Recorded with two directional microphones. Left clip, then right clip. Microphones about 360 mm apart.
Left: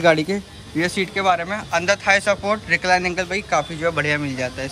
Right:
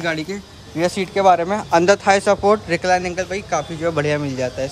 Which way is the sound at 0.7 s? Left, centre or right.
Centre.